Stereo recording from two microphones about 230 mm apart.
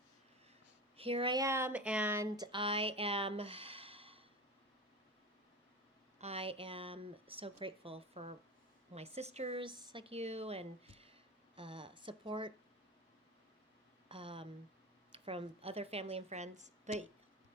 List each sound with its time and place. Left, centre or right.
0.9 s speech: right
6.1 s speech: right
14.1 s speech: right